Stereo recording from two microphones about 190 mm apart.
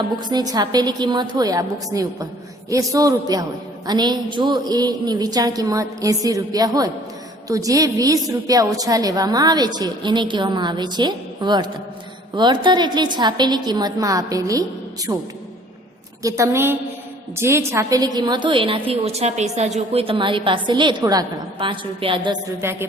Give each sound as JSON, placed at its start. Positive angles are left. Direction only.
{"t": 0.3, "sound": "a woman's voice", "side_deg": -20}
{"t": 22.6, "sound": "speech", "side_deg": -15}